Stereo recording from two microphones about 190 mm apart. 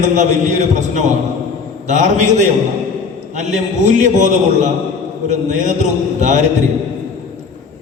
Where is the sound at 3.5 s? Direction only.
40° right (ahead or behind).